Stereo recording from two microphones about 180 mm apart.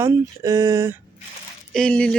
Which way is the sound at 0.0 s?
15° right (ahead or behind).